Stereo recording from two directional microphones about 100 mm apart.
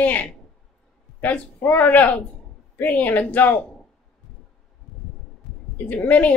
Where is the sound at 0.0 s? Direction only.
15° left (ahead or behind).